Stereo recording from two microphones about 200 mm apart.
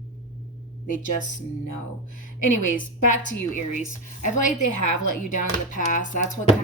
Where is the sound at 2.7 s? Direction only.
40° left (ahead or behind).